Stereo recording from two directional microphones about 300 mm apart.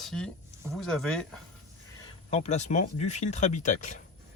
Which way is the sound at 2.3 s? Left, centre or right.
Left.